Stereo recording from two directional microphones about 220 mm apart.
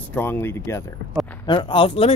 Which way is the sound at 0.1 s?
10° left (ahead or behind).